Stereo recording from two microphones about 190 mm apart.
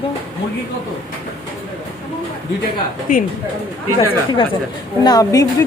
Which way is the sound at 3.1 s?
45° left (ahead or behind).